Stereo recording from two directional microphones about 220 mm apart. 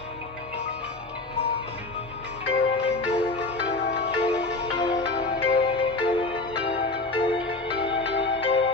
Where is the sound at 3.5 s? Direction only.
50° left (ahead or behind).